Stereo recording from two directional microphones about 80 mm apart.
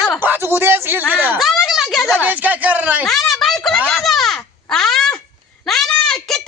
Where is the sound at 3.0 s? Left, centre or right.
Centre.